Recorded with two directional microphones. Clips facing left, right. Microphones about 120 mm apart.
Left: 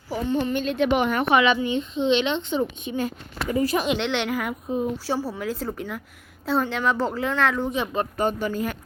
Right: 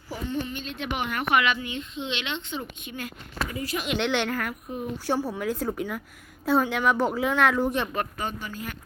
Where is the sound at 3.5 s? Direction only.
40° left (ahead or behind).